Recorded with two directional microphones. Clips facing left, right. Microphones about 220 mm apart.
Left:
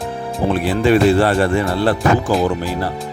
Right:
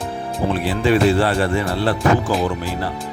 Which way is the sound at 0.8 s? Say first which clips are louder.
Left 3 dB; 45° left (ahead or behind).